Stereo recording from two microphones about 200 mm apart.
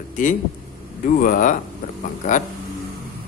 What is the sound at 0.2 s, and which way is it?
Speech, 40° left (ahead or behind).